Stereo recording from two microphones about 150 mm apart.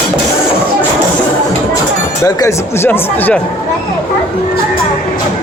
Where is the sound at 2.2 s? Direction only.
20° left (ahead or behind).